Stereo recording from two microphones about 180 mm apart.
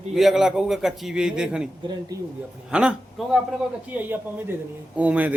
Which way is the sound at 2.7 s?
5° right (ahead or behind).